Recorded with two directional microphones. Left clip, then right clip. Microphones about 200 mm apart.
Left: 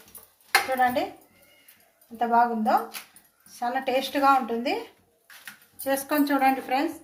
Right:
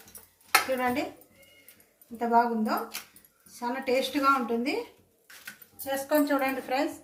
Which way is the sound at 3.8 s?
25° left (ahead or behind).